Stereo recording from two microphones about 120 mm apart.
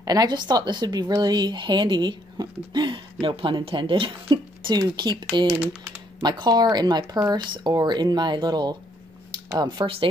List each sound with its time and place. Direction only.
0.0 s speech: 35° right (ahead or behind)